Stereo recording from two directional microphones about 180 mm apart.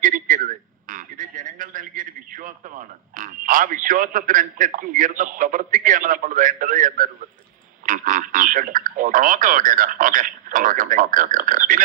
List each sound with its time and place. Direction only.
0.0 s a man's voice: 50° right (ahead or behind)